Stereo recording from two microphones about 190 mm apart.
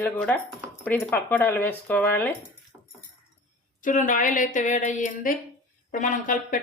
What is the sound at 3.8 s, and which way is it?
Speech, 45° left (ahead or behind).